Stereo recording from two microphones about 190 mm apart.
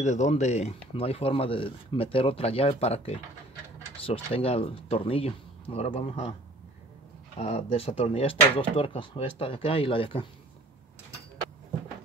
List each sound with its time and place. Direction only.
0.0 s speech: 40° left (ahead or behind)
7.3 s speech: 35° left (ahead or behind)